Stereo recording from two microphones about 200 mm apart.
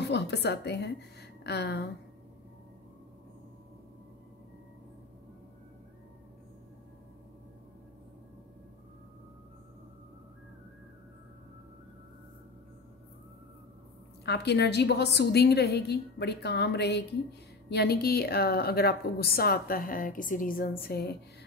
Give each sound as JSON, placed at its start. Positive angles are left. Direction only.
{"t": 0.0, "sound": "a woman's voice", "side_deg": 55}
{"t": 14.2, "sound": "a woman's voice", "side_deg": 55}